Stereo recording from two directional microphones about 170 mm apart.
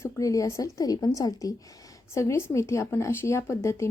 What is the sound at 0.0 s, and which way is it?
A woman's voice, 20° left (ahead or behind).